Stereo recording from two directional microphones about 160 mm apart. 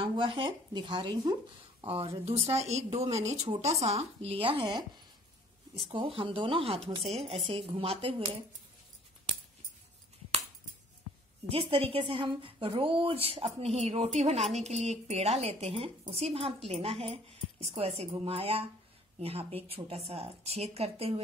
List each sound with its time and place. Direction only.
0.0 s a woman's voice: 30° right (ahead or behind)
3.1 s speech: 20° right (ahead or behind)
3.4 s a woman's voice: 40° right (ahead or behind)
11.4 s a woman's voice: 35° right (ahead or behind)